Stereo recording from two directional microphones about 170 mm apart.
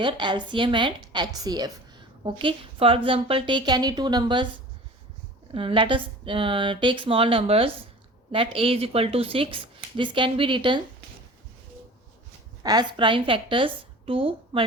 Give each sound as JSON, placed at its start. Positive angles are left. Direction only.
{"t": 0.0, "sound": "a woman's voice", "side_deg": -25}
{"t": 5.5, "sound": "a woman's voice", "side_deg": -30}
{"t": 12.6, "sound": "a woman's voice", "side_deg": -25}